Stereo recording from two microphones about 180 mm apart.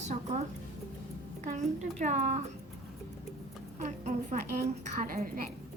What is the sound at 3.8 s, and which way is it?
Speech, 40° right (ahead or behind).